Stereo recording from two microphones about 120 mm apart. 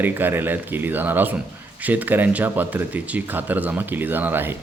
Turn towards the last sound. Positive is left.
turn(degrees=-15)  # may be behind; listen again after turning